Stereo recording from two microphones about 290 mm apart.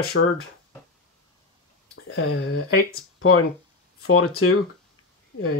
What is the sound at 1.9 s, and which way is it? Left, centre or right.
Speech, left.